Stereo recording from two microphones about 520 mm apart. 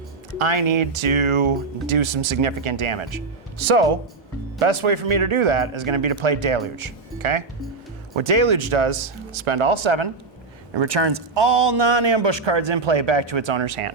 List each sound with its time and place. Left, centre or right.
0.3 s a man's voice: right